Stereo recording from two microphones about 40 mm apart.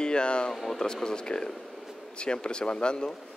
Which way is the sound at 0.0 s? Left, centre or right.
Left.